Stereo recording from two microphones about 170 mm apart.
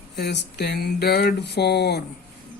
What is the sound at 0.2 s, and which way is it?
Speech, 75° left (ahead or behind).